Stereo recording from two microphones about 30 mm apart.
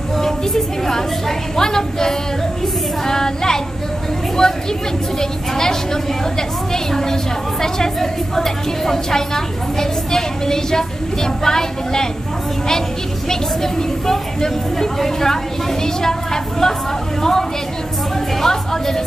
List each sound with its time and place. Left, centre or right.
0.2 s music: centre
1.6 s speech: centre
2.6 s female singing: centre
4.4 s a woman's voice: left
13.3 s a woman's voice: centre